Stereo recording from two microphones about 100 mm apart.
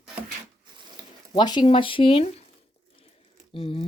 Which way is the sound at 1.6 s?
60° left (ahead or behind).